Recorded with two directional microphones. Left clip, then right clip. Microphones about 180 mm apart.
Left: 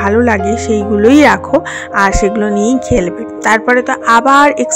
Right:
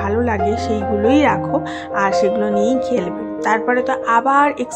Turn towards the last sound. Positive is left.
turn(degrees=30)  # may be behind; listen again after turning